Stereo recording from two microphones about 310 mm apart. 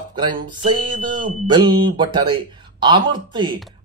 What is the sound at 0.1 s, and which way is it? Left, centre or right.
Speech, centre.